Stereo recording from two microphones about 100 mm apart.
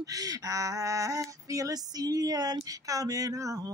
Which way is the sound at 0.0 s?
35° right (ahead or behind).